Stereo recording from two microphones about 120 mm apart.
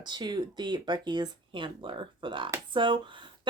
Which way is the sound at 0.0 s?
35° right (ahead or behind).